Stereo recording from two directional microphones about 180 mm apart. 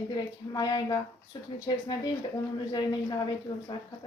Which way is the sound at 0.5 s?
20° left (ahead or behind).